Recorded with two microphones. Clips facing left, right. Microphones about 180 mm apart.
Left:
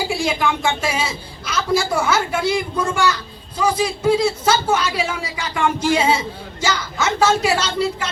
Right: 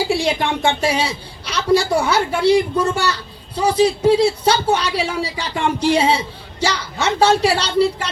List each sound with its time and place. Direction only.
0.1 s a man's voice: 35° right (ahead or behind)